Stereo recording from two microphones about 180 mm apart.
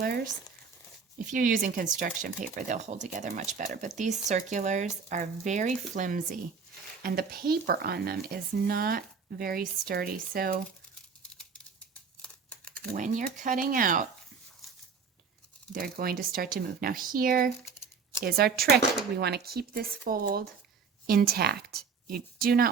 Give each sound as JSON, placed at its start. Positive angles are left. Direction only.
{"t": 1.3, "sound": "speech", "side_deg": -50}
{"t": 12.2, "sound": "crumpling", "side_deg": 5}
{"t": 12.9, "sound": "speech", "side_deg": -45}
{"t": 15.7, "sound": "a woman's voice", "side_deg": -55}